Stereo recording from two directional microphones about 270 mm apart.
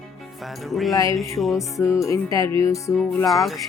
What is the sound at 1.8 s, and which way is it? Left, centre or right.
Speech, centre.